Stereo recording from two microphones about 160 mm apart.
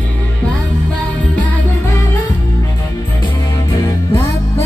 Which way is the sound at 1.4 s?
15° left (ahead or behind).